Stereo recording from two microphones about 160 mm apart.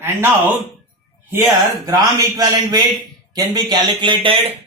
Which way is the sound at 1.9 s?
25° right (ahead or behind).